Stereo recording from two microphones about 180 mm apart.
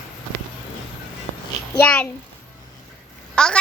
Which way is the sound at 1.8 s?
5° left (ahead or behind).